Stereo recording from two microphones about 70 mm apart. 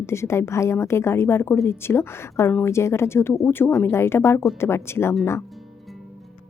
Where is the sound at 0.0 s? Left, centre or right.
Left.